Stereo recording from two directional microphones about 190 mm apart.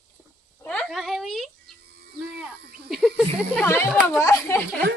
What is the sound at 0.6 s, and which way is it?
Speech, centre (ahead or behind).